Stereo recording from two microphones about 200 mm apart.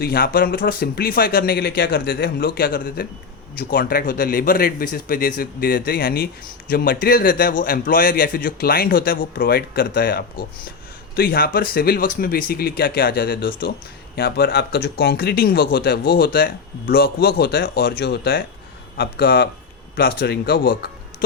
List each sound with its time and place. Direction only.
0.0 s speech: 50° left (ahead or behind)